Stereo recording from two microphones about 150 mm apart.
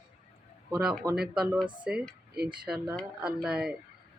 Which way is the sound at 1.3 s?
5° right (ahead or behind).